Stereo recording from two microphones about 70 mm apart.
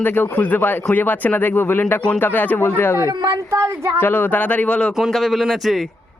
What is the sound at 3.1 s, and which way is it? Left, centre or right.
Speech, right.